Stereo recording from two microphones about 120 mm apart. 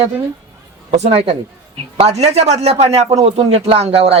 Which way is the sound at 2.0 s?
60° right (ahead or behind).